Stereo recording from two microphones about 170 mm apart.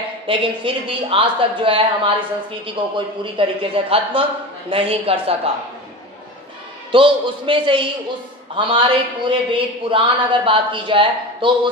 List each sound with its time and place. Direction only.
0.3 s a man's voice: 30° right (ahead or behind)
6.9 s a man's voice: 30° right (ahead or behind)